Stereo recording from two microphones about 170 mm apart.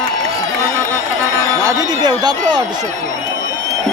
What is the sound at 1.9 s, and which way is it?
Speech, 25° right (ahead or behind).